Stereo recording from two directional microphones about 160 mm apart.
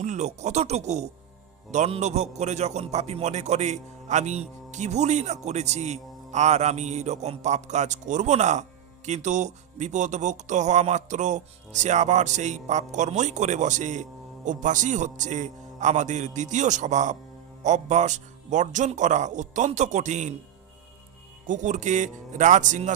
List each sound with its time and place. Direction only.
0.0 s speech: 50° right (ahead or behind)
21.4 s speech: 50° right (ahead or behind)